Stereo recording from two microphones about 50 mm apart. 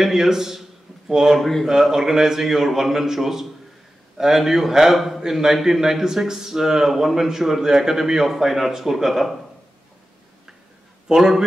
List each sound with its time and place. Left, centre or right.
0.0 s a man's voice: centre
1.7 s a man's voice: centre
11.1 s a man's voice: centre